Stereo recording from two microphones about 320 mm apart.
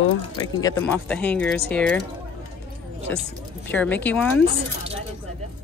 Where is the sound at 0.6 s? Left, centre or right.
Centre.